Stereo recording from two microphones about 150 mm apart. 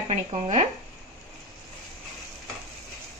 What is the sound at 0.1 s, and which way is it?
Speech, 50° right (ahead or behind).